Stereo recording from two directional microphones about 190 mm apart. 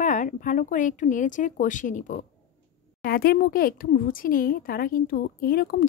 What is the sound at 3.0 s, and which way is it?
Speech, 50° left (ahead or behind).